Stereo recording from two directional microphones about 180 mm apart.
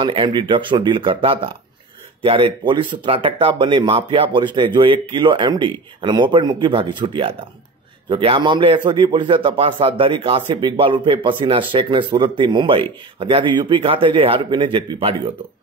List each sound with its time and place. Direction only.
0.0 s a man's voice: 25° right (ahead or behind)